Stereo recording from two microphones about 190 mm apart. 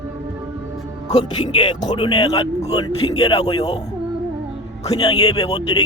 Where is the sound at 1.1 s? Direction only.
25° left (ahead or behind).